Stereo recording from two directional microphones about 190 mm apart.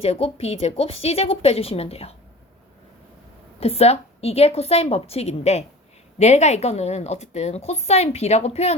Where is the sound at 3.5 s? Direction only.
30° left (ahead or behind).